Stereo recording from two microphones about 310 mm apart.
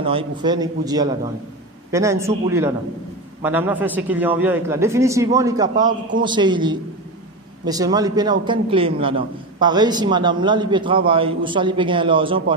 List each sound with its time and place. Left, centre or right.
0.0 s a man's voice: centre